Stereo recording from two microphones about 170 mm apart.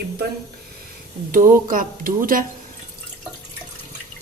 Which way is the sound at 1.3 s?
55° right (ahead or behind).